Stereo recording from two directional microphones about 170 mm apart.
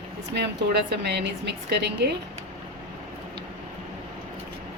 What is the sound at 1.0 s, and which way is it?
Speech, 80° right.